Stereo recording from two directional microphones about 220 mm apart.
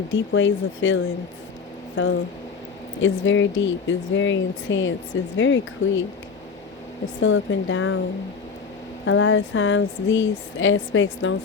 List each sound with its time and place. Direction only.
0.1 s speech: 60° left (ahead or behind)
7.2 s speech: 65° left (ahead or behind)
9.0 s speech: 65° left (ahead or behind)